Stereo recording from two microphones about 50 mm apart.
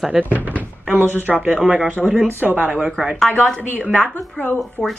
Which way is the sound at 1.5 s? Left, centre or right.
Centre.